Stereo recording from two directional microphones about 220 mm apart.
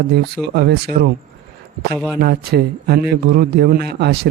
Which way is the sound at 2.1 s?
45° right (ahead or behind).